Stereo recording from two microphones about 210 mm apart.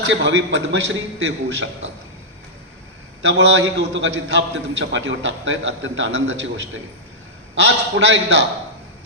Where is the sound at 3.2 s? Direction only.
60° right (ahead or behind).